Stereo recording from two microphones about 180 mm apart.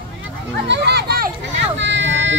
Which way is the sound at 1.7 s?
90° right.